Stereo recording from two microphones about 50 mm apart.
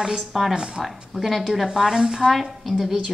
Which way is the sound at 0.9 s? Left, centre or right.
Centre.